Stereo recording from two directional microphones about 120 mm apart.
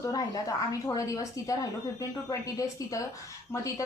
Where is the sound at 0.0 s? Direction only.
30° left (ahead or behind).